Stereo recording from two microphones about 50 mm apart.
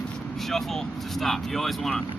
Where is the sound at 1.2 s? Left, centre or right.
Centre.